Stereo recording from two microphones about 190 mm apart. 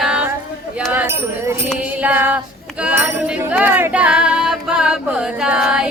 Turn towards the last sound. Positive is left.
turn(degrees=-5)  # may be behind; listen again after turning